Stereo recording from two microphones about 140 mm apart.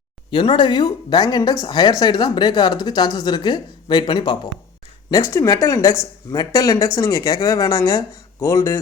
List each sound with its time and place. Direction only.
0.3 s speech: 35° left (ahead or behind)